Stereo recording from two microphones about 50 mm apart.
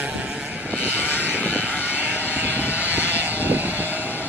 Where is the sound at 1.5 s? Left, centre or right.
Right.